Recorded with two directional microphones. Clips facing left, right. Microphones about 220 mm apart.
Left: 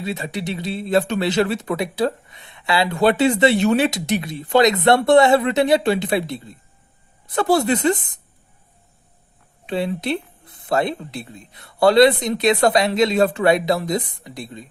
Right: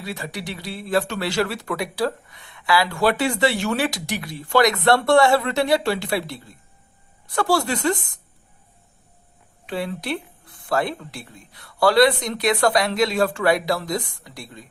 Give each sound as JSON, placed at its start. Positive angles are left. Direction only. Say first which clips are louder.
{"t": 0.0, "sound": "speech", "louder": "left 5 dB", "side_deg": 20}
{"t": 9.6, "sound": "speech", "louder": "left 4 dB", "side_deg": 20}